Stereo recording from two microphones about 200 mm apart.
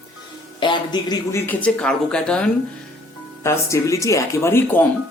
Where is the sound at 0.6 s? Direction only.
20° left (ahead or behind).